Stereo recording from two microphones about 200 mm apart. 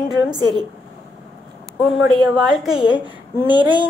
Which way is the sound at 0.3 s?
20° right (ahead or behind).